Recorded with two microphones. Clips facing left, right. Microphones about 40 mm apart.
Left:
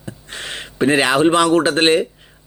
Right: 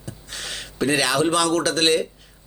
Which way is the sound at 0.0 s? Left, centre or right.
Left.